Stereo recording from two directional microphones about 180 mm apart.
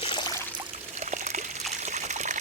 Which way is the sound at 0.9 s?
40° right (ahead or behind).